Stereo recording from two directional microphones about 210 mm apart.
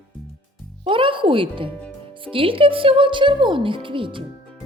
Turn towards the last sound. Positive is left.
turn(degrees=-25)  # may be behind; listen again after turning